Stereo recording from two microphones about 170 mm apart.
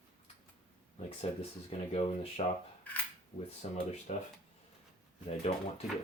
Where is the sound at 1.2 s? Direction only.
35° left (ahead or behind).